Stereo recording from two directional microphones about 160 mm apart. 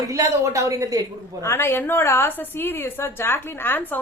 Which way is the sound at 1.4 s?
15° left (ahead or behind).